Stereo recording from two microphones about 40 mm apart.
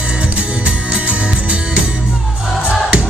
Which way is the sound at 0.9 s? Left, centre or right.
Right.